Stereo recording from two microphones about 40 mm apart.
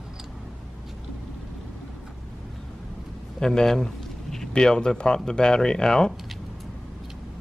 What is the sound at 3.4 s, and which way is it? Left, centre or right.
Speech, centre.